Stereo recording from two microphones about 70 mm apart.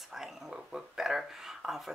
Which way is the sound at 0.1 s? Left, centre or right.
Centre.